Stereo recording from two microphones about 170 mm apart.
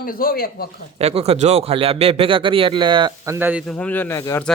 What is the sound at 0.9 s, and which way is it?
Speech, 35° right (ahead or behind).